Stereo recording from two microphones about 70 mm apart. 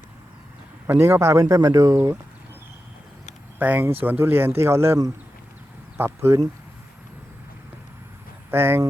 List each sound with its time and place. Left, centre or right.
0.9 s speech: right
3.6 s speech: right
6.0 s speech: right
8.4 s speech: right